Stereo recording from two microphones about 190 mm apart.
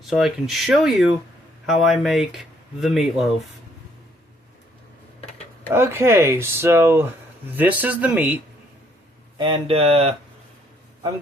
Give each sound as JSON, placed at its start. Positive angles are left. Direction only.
{"t": 0.0, "sound": "speech", "side_deg": 0}
{"t": 5.7, "sound": "speech", "side_deg": -15}
{"t": 9.4, "sound": "speech", "side_deg": -25}